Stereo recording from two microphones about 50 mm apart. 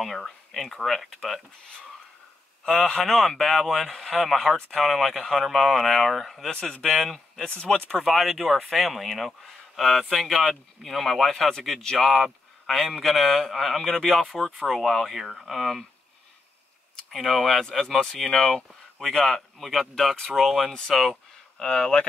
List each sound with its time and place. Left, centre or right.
0.2 s speech: centre
2.6 s speech: centre
4.6 s speech: centre
6.5 s speech: centre
6.9 s a man's voice: centre
7.4 s speech: centre
8.0 s speech: centre
17.1 s speech: centre
20.9 s a sound: centre
21.6 s speech: centre